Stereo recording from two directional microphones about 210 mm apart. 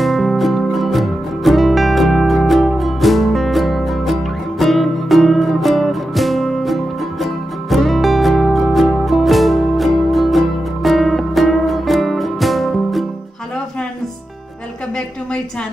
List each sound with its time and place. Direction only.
0.0 s music: centre (ahead or behind)